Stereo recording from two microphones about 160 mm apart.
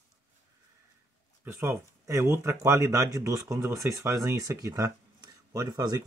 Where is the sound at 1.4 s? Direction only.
15° right (ahead or behind).